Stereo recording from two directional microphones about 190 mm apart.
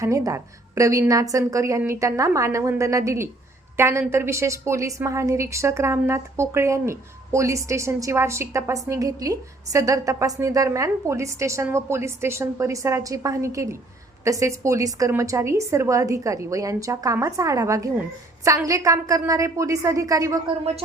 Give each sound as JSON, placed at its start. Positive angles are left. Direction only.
{"t": 0.0, "sound": "a woman's voice", "side_deg": -15}